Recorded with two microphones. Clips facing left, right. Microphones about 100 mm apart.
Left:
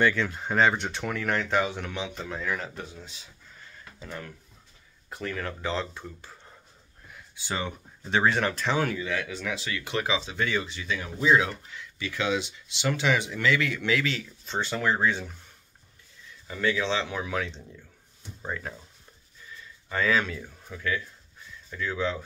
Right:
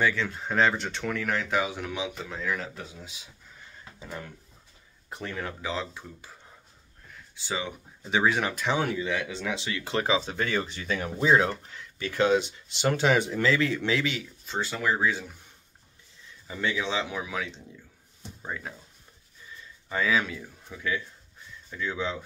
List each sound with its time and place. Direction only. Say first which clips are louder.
0.0 s speech: left 2 dB; centre (ahead or behind); by 5.5 s 20° right (ahead or behind)
5.6 s speech: left 2 dB; 5° right (ahead or behind); by 14.2 s 20° right (ahead or behind)
14.4 s speech: left 1 dB; 5° right (ahead or behind)
16.4 s speech: left 3 dB; 15° right (ahead or behind)
19.9 s speech: left 1 dB; 5° right (ahead or behind)